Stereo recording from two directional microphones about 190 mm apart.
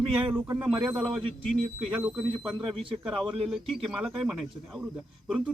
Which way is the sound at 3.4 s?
Centre (ahead or behind).